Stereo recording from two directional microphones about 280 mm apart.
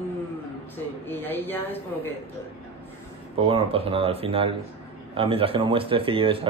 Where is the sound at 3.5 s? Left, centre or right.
Centre.